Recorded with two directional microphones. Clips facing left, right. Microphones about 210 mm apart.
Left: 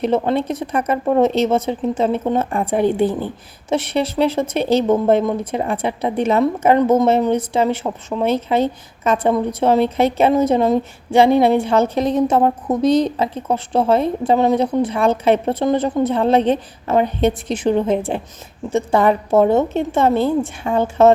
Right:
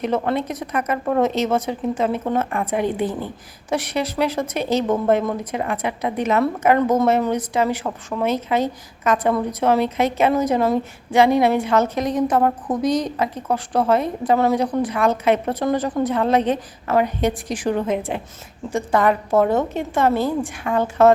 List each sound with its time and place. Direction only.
0.0 s a woman's voice: 30° left (ahead or behind)